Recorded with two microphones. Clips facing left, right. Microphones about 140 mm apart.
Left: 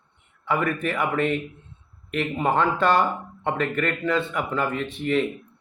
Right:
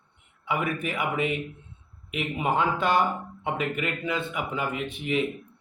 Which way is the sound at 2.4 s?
10° right (ahead or behind).